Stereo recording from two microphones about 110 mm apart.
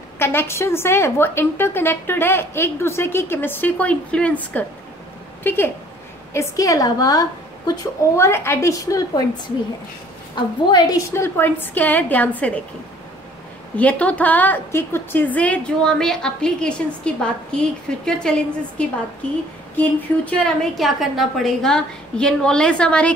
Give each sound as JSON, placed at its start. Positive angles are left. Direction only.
{"t": 0.2, "sound": "a woman's voice", "side_deg": 20}
{"t": 6.5, "sound": "a woman's voice", "side_deg": 30}
{"t": 10.3, "sound": "a woman's voice", "side_deg": 40}
{"t": 11.1, "sound": "a woman's voice", "side_deg": 20}
{"t": 13.7, "sound": "a woman's voice", "side_deg": 10}
{"t": 20.7, "sound": "a woman's voice", "side_deg": 0}